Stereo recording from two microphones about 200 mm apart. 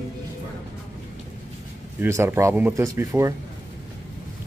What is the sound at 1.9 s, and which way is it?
Speech, 15° right (ahead or behind).